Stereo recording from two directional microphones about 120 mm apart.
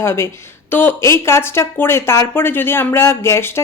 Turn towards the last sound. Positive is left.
turn(degrees=20)  # may be behind; listen again after turning